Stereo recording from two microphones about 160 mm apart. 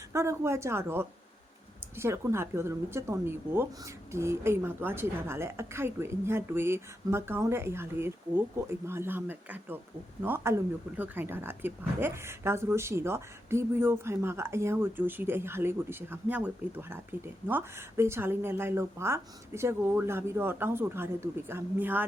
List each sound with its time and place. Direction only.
0.1 s a woman's voice: 15° right (ahead or behind)